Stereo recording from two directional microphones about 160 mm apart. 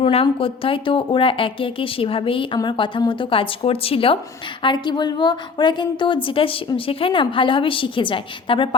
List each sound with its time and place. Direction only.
0.0 s a woman's voice: 35° left (ahead or behind)